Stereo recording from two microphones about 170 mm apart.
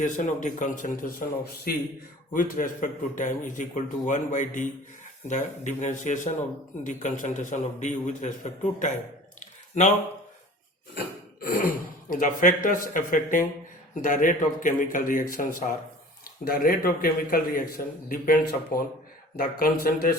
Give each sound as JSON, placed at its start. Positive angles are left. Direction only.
{"t": 0.3, "sound": "a man's voice", "side_deg": 45}
{"t": 2.3, "sound": "a man's voice", "side_deg": 50}
{"t": 10.9, "sound": "cough", "side_deg": 65}
{"t": 12.1, "sound": "a man's voice", "side_deg": 50}